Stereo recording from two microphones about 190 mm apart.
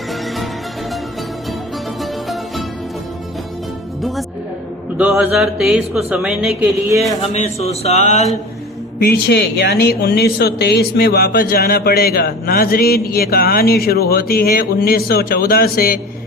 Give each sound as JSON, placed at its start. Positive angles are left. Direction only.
{"t": 2.0, "sound": "music", "side_deg": 0}
{"t": 4.9, "sound": "speech", "side_deg": -5}
{"t": 7.2, "sound": "speech", "side_deg": 35}
{"t": 9.0, "sound": "speech", "side_deg": 55}